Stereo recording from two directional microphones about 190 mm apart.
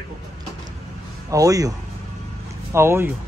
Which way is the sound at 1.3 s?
20° right (ahead or behind).